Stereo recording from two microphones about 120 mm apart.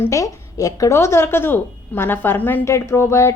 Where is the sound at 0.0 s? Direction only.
25° left (ahead or behind).